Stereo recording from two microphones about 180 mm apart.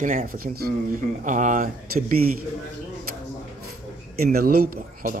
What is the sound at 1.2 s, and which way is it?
Speech, 45° right (ahead or behind).